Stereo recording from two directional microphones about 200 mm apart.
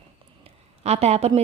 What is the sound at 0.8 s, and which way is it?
Speech, 30° right (ahead or behind).